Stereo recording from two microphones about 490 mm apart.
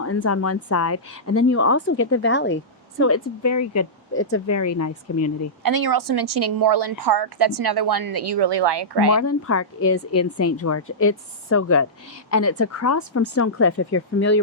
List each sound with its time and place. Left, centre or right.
0.0 s speech: left
5.6 s a woman's voice: right
9.1 s speech: left